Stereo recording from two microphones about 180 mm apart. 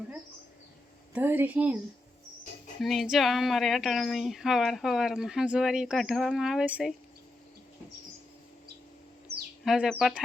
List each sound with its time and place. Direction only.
1.1 s a woman's voice: 10° right (ahead or behind)
2.8 s speech: centre (ahead or behind)
9.6 s speech: 5° right (ahead or behind)